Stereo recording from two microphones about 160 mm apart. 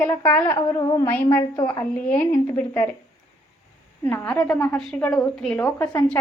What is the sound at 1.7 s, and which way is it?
Speech, 10° left (ahead or behind).